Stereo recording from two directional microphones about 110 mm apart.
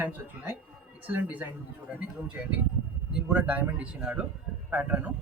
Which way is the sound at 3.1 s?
5° right (ahead or behind).